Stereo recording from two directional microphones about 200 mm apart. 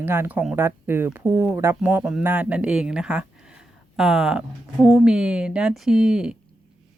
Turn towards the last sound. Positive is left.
turn(degrees=-5)  # may be behind; listen again after turning